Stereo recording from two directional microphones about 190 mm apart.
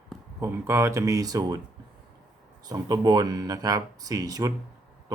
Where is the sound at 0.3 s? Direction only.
15° right (ahead or behind).